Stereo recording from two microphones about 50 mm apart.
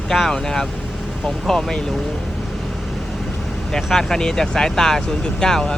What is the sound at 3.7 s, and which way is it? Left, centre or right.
Speech, centre.